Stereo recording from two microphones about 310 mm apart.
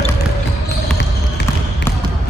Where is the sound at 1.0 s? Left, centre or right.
Left.